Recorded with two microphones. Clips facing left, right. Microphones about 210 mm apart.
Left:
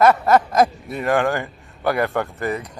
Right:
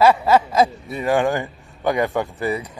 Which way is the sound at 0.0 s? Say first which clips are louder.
Even; 10° right (ahead or behind).